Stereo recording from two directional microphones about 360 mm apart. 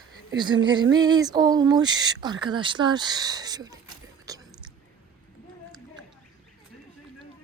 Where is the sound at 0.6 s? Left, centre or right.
Centre.